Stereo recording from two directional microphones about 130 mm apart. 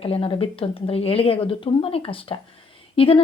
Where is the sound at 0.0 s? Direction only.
45° left (ahead or behind).